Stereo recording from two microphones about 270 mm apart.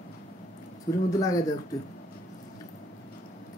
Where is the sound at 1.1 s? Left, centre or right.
Centre.